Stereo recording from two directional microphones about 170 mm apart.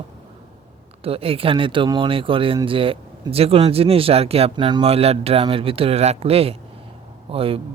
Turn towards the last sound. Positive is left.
turn(degrees=-35)  # may be behind; listen again after turning